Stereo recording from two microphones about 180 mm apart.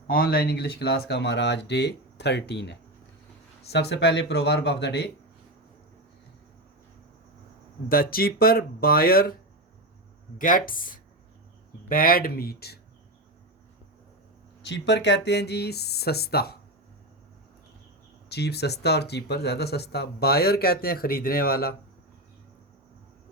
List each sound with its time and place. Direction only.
0.1 s speech: 55° left (ahead or behind); by 5.1 s 70° left (ahead or behind)
7.9 s speech: 55° left (ahead or behind)
10.3 s speech: 50° left (ahead or behind)
14.6 s speech: 75° left (ahead or behind)
18.3 s speech: 65° left (ahead or behind)